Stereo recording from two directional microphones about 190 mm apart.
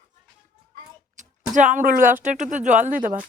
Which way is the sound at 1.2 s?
40° right (ahead or behind).